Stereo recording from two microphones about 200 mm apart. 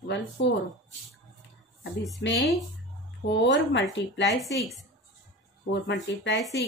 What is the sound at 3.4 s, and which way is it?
Speech, 65° left (ahead or behind).